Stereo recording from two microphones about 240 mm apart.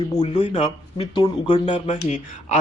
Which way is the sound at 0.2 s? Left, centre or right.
Left.